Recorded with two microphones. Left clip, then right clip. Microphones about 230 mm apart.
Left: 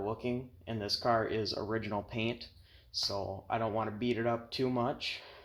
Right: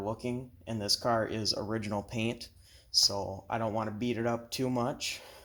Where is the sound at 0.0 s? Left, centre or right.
Right.